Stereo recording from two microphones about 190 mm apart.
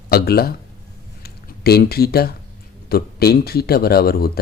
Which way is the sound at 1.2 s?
55° left (ahead or behind).